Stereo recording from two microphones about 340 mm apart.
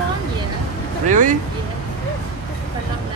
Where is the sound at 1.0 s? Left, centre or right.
Right.